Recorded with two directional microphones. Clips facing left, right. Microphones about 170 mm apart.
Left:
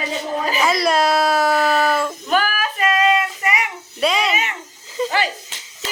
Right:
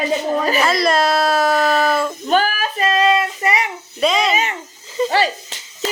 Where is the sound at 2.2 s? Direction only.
30° right (ahead or behind).